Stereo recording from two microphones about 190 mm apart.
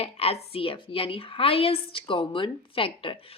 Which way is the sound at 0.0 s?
30° left (ahead or behind).